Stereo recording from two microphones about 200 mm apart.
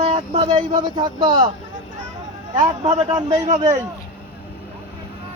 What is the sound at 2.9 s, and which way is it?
Speech, 20° right (ahead or behind).